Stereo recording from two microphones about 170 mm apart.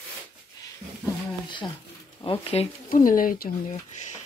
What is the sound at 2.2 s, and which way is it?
Speech, 35° left (ahead or behind).